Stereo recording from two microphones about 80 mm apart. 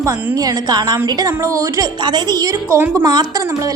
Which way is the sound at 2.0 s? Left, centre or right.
Right.